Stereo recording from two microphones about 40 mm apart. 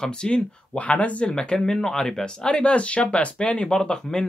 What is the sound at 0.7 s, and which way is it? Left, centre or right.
Speech, left.